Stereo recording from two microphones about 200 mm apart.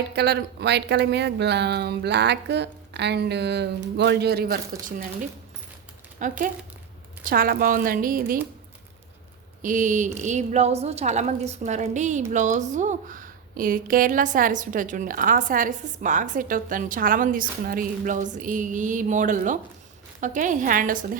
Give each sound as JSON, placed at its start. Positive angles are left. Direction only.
{"t": 0.1, "sound": "speech", "side_deg": -55}
{"t": 6.2, "sound": "speech", "side_deg": -40}
{"t": 9.6, "sound": "speech", "side_deg": -40}